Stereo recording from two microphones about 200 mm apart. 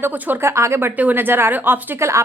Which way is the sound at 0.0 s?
10° right (ahead or behind).